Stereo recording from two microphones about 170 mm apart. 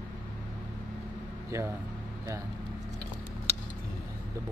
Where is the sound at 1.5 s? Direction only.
15° right (ahead or behind).